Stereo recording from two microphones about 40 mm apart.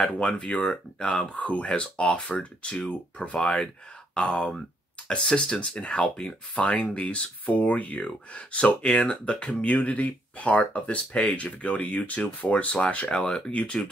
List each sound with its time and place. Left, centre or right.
0.0 s speech: left
1.4 s speech: left
2.6 s speech: left